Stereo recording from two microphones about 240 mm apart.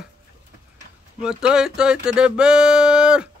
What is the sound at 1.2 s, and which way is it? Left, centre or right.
Speech, centre.